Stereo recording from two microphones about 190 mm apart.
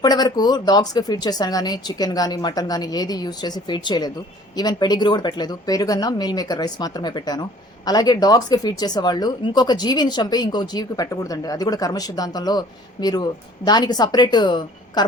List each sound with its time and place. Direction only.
0.0 s speech: 20° left (ahead or behind)